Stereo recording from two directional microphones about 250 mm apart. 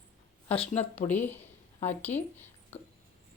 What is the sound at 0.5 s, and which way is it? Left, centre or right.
Speech, left.